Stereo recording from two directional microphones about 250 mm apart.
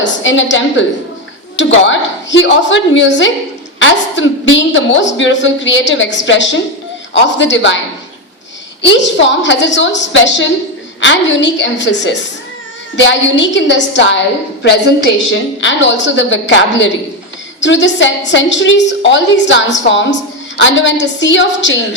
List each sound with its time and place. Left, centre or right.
0.0 s a woman's voice: left
8.8 s a woman's voice: left